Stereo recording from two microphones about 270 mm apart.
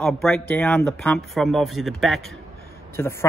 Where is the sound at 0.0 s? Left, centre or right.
Centre.